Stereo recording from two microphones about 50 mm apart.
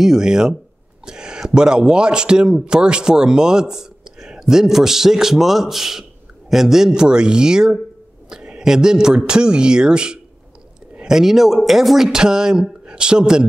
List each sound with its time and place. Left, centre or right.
0.0 s a man's voice: centre